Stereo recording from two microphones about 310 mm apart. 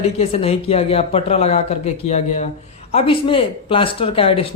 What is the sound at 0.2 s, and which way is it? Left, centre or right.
A man's voice, centre.